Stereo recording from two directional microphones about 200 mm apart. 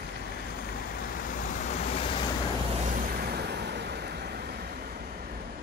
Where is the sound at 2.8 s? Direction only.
45° right (ahead or behind).